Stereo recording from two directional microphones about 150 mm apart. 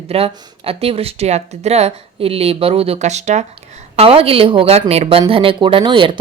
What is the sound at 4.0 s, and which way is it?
Speech, 40° right (ahead or behind).